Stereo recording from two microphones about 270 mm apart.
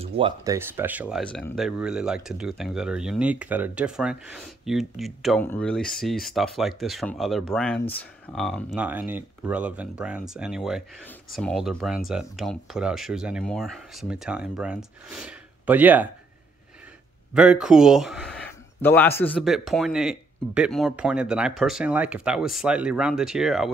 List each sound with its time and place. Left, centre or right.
0.0 s speech: centre
0.6 s speech: centre
17.3 s speech: centre